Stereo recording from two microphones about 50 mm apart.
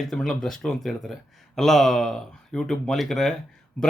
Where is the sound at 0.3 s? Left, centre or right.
Centre.